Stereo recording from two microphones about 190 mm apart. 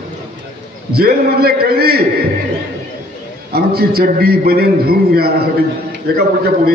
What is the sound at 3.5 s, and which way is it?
A man's voice, 55° right (ahead or behind).